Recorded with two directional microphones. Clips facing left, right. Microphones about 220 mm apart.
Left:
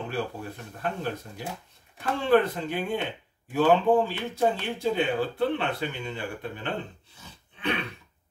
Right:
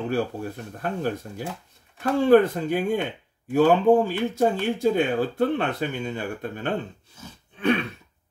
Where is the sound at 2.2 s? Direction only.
45° right (ahead or behind).